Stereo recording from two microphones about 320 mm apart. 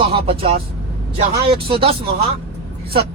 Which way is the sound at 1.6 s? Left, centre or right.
Centre.